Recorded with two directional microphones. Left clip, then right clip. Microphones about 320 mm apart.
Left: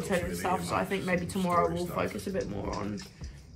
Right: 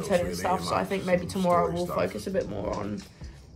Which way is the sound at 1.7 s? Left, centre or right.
Centre.